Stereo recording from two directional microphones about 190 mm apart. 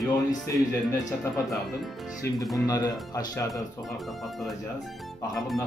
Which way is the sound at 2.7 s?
20° left (ahead or behind).